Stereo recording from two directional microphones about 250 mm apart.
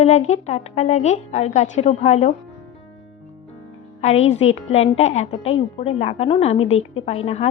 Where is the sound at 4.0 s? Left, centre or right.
Left.